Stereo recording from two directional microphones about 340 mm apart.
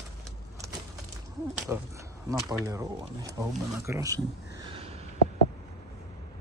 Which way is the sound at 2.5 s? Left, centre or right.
Centre.